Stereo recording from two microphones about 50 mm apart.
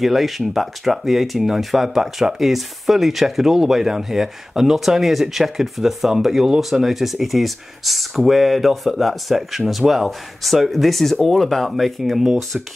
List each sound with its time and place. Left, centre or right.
0.0 s speech: centre